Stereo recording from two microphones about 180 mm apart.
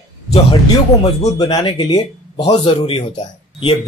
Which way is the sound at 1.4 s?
25° left (ahead or behind).